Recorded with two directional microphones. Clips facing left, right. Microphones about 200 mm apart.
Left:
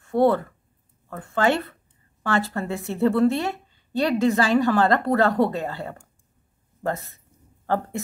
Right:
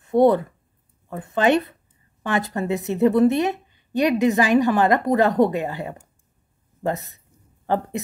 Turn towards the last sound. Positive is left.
turn(degrees=-15)  # may be behind; listen again after turning